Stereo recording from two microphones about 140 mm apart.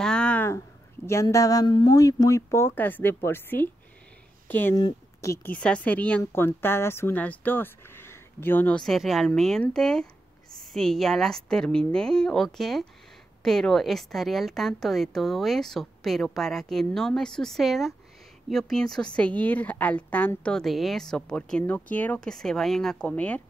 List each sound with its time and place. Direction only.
0.0 s a sound: 5° left (ahead or behind)
1.0 s speech: 20° left (ahead or behind)
4.7 s speech: 25° left (ahead or behind)
5.5 s a woman's voice: 10° left (ahead or behind)